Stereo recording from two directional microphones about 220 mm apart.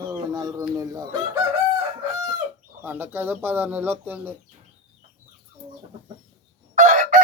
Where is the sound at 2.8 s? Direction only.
10° right (ahead or behind).